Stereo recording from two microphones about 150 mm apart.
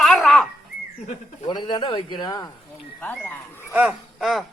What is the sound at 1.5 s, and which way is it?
A man's voice, 30° left (ahead or behind).